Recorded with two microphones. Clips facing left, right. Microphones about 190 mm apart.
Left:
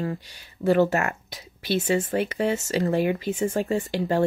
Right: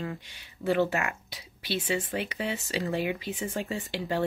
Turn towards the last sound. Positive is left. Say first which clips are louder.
# left 7 dB
turn(degrees=45)  # may be behind; listen again after turning